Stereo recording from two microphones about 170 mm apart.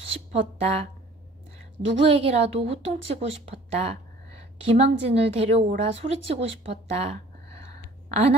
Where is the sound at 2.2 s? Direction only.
35° right (ahead or behind).